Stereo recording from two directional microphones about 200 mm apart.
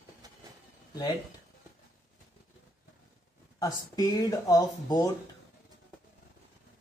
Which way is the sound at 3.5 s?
20° left (ahead or behind).